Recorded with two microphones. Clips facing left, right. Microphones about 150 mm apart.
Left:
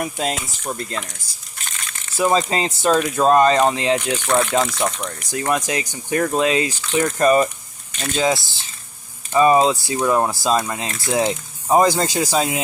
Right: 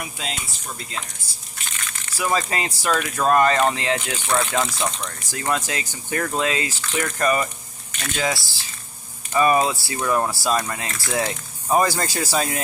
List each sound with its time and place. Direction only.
0.0 s speech: 45° left (ahead or behind)
2.1 s speech: 25° left (ahead or behind)